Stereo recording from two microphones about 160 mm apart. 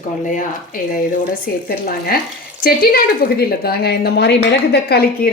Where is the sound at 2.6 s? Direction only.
70° left (ahead or behind).